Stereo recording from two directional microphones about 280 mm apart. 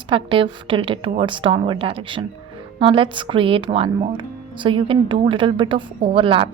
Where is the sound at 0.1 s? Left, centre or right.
Centre.